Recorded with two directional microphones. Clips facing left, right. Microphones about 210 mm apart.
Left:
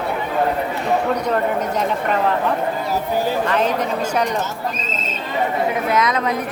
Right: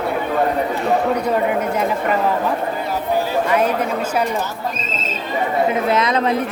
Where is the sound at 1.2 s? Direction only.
10° right (ahead or behind).